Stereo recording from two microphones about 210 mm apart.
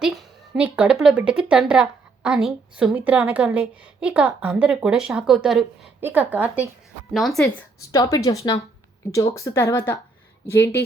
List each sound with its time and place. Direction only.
0.0 s a woman's voice: centre (ahead or behind)
7.9 s speech: 15° left (ahead or behind)